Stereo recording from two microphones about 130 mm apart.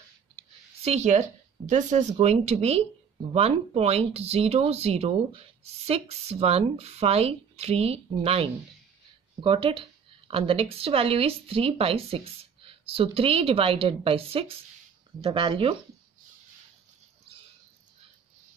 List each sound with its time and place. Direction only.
0.8 s speech: 60° right (ahead or behind)
2.2 s speech: 55° right (ahead or behind)